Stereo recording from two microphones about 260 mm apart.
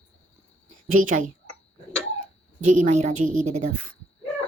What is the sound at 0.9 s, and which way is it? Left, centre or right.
Speech, right.